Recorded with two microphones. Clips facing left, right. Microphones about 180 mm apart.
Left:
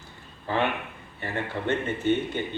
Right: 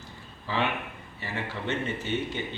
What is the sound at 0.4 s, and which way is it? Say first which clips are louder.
Speech: left 3 dB; 55° left (ahead or behind).